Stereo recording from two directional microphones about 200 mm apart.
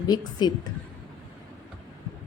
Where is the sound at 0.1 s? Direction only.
20° left (ahead or behind).